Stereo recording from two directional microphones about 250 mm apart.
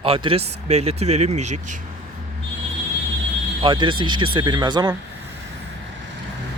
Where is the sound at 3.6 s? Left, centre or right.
Centre.